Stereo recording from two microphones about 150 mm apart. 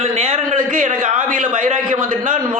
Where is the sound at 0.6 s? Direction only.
60° right (ahead or behind).